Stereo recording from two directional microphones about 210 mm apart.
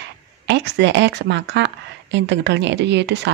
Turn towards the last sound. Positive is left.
turn(degrees=-55)  # may be behind; listen again after turning